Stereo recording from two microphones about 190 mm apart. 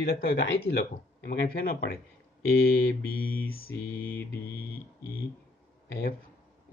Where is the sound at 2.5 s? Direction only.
50° left (ahead or behind).